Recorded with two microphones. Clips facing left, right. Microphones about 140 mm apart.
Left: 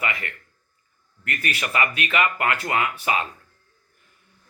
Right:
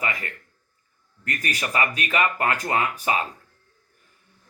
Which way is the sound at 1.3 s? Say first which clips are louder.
Even; 35° right (ahead or behind).